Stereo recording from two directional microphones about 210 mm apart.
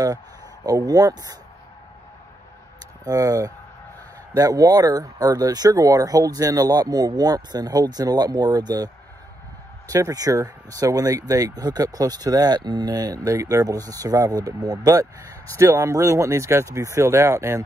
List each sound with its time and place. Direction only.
0.7 s speech: 15° right (ahead or behind)
3.1 s speech: 15° right (ahead or behind)